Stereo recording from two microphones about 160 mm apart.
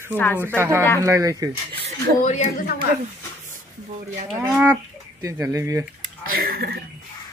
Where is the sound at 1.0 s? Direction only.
20° right (ahead or behind).